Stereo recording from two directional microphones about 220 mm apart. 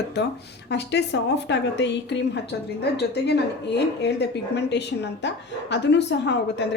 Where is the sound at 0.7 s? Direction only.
50° left (ahead or behind).